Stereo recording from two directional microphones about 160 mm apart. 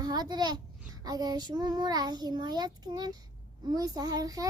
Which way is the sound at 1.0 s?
25° right (ahead or behind).